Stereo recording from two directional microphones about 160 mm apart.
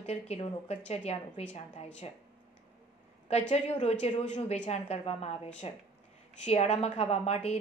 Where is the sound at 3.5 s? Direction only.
45° left (ahead or behind).